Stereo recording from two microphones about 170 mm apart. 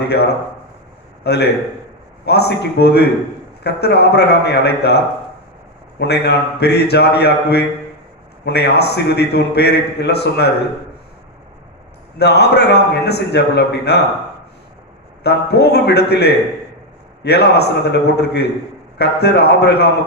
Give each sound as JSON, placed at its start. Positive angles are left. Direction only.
{"t": 0.0, "sound": "a man's voice", "side_deg": 70}
{"t": 12.2, "sound": "a man's voice", "side_deg": 75}
{"t": 15.2, "sound": "a man's voice", "side_deg": 75}